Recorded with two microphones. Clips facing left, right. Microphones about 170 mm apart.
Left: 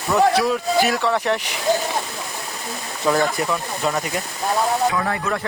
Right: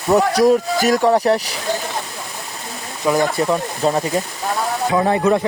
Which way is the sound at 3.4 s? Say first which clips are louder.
Right 5 dB; 30° right (ahead or behind).